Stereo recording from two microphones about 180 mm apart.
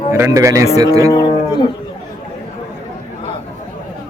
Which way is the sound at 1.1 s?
25° left (ahead or behind).